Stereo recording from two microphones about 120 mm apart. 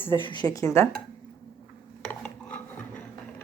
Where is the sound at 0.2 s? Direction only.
40° left (ahead or behind); by 0.9 s 25° left (ahead or behind).